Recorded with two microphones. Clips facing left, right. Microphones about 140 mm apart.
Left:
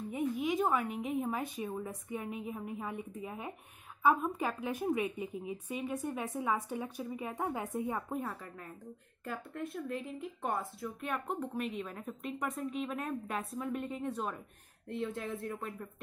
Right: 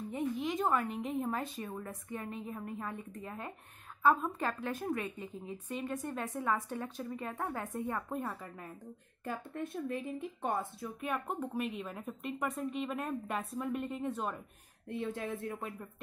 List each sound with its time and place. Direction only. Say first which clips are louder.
0.1 s a woman's voice: left 2 dB; 5° left (ahead or behind)
8.1 s a woman's voice: even; centre (ahead or behind)
9.2 s speech: right 1 dB; 20° right (ahead or behind)
11.1 s a woman's voice: right 1 dB; centre (ahead or behind)
14.9 s speech: even; 20° right (ahead or behind)